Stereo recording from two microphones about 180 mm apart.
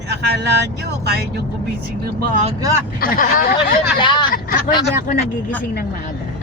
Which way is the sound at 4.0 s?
25° left (ahead or behind).